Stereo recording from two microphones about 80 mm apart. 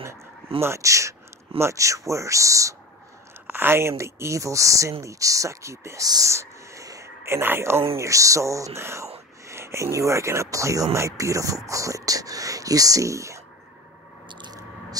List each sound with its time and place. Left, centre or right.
0.6 s speech: right
3.4 s speech: right
6.0 s speech: right
14.3 s a sound: right